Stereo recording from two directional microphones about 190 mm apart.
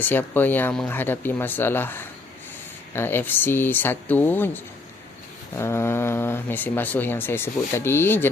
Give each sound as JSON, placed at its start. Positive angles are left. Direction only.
{"t": 0.0, "sound": "speech", "side_deg": 10}